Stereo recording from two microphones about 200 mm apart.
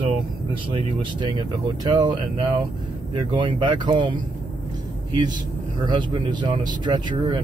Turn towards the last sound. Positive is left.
turn(degrees=-20)  # may be behind; listen again after turning